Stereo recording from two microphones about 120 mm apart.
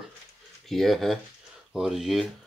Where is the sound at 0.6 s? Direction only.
Centre (ahead or behind).